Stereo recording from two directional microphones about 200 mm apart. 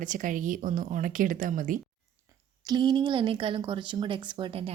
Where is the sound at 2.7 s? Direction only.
20° right (ahead or behind).